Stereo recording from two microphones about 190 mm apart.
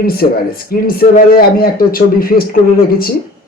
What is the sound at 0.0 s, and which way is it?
Speech, 50° left (ahead or behind).